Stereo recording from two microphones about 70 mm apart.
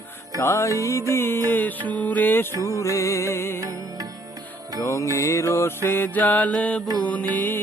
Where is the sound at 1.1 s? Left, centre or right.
Left.